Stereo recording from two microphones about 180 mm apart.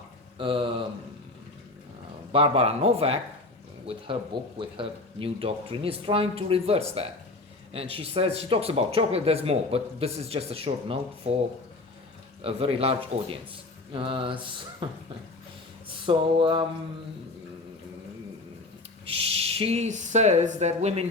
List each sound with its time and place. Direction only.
0.3 s speech: 30° right (ahead or behind)
2.3 s speech: 30° right (ahead or behind)
12.4 s speech: 30° right (ahead or behind)
15.9 s a sound: 30° right (ahead or behind)
19.0 s speech: 30° right (ahead or behind)